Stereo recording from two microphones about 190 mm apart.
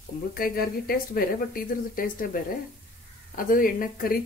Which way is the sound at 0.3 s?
50° left (ahead or behind).